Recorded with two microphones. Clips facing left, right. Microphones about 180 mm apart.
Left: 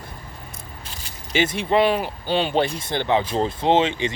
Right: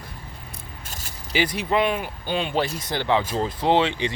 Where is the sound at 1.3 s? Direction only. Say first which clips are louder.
Left 3 dB; 25° left (ahead or behind).